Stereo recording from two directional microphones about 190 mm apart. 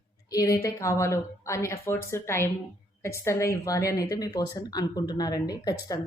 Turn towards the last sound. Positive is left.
turn(degrees=20)  # may be behind; listen again after turning